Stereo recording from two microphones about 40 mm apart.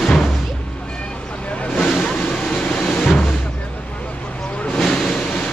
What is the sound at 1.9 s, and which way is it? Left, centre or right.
Vehicle, centre.